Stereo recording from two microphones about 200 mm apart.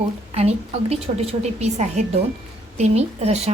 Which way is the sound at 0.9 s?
30° right (ahead or behind).